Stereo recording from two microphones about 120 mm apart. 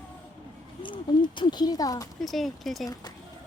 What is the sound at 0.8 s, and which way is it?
Speech, 40° left (ahead or behind).